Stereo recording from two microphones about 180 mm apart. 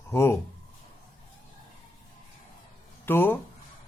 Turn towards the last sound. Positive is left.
turn(degrees=10)  # may be behind; listen again after turning